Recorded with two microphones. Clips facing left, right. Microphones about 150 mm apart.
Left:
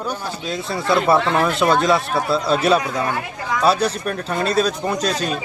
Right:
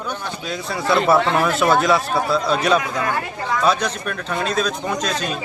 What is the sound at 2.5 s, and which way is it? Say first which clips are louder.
Speech: left 1 dB; 35° left (ahead or behind).